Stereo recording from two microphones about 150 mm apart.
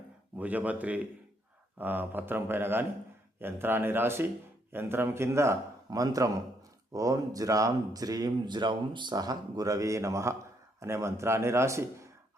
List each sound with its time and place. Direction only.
0.3 s speech: 10° right (ahead or behind)